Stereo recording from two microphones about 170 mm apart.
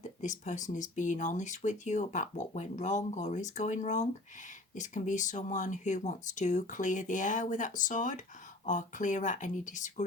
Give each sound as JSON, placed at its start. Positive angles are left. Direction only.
{"t": 0.2, "sound": "speech", "side_deg": 45}